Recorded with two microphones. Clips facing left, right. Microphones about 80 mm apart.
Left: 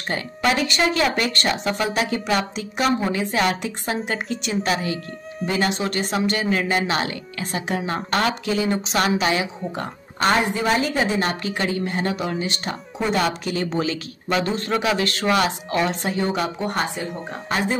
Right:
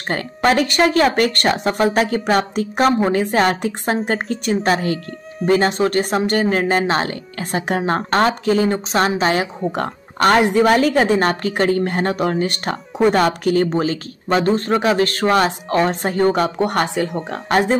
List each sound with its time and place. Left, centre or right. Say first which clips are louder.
0.1 s a woman's voice: right 5 dB; right
9.7 s a woman's voice: right 7 dB; right
17.5 s speech: right 7 dB; right